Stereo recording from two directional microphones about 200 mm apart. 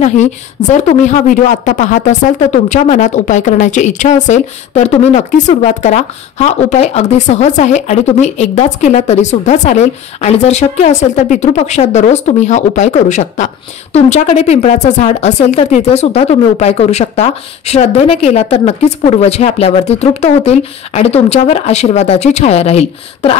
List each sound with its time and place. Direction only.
0.0 s speech: 35° left (ahead or behind)